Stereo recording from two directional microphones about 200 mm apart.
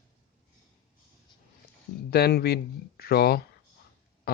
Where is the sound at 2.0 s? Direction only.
50° left (ahead or behind).